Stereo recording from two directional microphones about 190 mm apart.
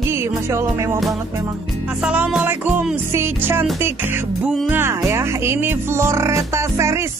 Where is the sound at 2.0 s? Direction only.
5° right (ahead or behind).